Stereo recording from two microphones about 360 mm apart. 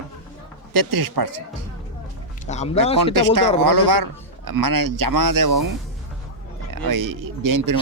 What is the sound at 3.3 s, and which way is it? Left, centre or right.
A man's voice, right.